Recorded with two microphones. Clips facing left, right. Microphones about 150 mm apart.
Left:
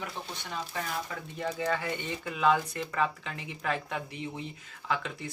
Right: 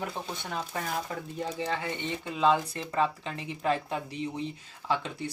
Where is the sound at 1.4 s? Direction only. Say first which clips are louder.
Left 2 dB; 25° right (ahead or behind).